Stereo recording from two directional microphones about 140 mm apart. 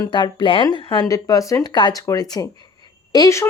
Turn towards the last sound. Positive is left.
turn(degrees=25)  # may be behind; listen again after turning